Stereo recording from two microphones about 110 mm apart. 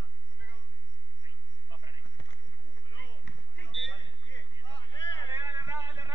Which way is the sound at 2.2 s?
50° left (ahead or behind).